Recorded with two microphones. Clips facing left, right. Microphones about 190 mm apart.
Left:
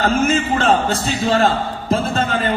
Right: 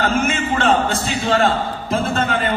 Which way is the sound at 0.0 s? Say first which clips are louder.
Left 3 dB; 35° left (ahead or behind).